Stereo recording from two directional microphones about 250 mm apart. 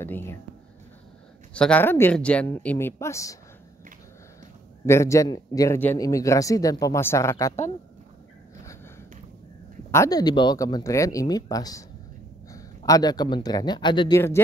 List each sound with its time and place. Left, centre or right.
0.0 s a sound: centre
1.5 s a man's voice: centre
4.8 s a man's voice: centre
9.8 s a man's voice: centre